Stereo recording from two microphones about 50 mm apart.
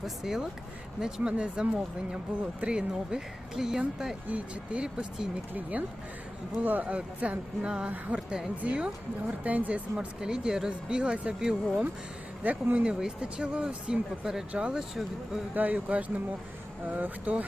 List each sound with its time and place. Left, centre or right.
0.0 s speech: centre
1.0 s speech: right
4.3 s speech: right
6.6 s speech: right
10.2 s speech: centre
12.4 s speech: right
12.8 s speech: centre
14.8 s speech: centre
15.5 s speech: right